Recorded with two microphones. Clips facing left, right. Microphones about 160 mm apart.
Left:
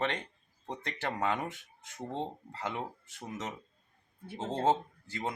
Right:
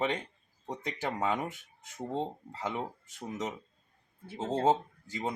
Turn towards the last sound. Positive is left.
turn(degrees=-10)  # may be behind; listen again after turning